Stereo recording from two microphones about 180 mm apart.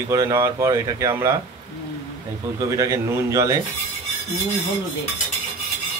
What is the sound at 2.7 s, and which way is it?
Speech, 15° right (ahead or behind).